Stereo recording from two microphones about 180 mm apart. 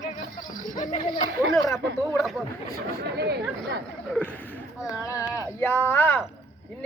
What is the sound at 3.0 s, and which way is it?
Speech, 65° right (ahead or behind).